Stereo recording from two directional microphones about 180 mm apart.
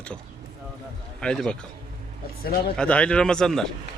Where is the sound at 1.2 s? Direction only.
5° left (ahead or behind).